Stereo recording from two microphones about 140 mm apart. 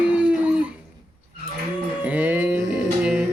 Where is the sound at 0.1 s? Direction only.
10° right (ahead or behind).